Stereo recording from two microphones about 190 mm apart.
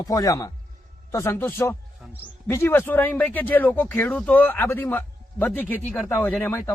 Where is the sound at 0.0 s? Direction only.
20° left (ahead or behind).